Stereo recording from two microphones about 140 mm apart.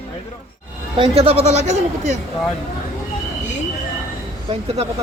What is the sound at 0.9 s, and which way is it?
Speech, 40° right (ahead or behind).